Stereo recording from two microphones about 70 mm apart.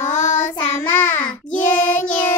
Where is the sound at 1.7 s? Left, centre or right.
Centre.